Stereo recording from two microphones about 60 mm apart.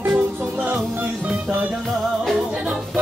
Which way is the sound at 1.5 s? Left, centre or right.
Right.